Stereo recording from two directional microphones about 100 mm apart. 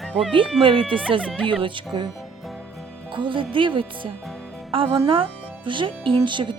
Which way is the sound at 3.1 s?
55° right (ahead or behind).